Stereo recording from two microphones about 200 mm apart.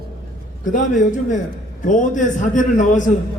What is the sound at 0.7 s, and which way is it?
A man's voice, 40° left (ahead or behind).